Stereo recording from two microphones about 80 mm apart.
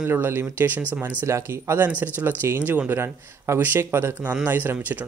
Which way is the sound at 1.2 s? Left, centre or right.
Right.